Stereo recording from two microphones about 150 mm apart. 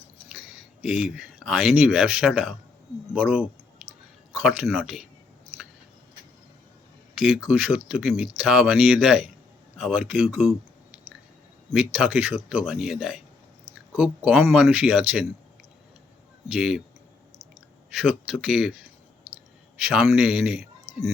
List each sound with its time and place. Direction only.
0.3 s speech: 5° right (ahead or behind)
7.2 s speech: 5° right (ahead or behind)
11.7 s speech: 10° right (ahead or behind)
16.5 s speech: 5° right (ahead or behind)
18.0 s speech: 5° right (ahead or behind)
20.9 s a sound: 40° right (ahead or behind)